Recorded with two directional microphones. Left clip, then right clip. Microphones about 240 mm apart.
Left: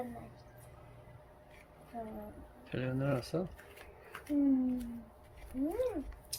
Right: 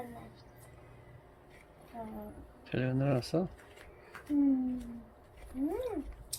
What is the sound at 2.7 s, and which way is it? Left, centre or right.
Speech, right.